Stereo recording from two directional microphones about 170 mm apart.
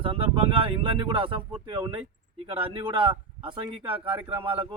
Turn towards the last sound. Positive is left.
turn(degrees=-30)  # may be behind; listen again after turning